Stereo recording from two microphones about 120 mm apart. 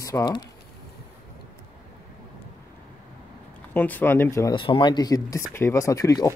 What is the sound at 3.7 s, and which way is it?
Speech, 15° left (ahead or behind).